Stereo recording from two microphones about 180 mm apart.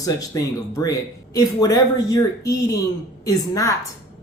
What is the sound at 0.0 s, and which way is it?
Speech, 20° left (ahead or behind).